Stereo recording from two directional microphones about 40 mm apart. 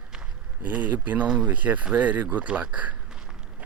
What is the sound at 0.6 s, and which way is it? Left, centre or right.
Speech, right.